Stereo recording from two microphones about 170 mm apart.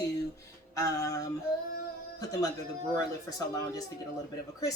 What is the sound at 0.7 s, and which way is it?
A man's voice, 20° left (ahead or behind).